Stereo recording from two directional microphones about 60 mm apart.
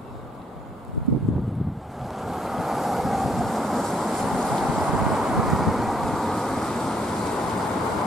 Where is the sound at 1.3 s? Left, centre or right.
Centre.